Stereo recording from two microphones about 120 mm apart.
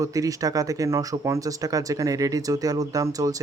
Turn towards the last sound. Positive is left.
turn(degrees=-30)  # may be behind; listen again after turning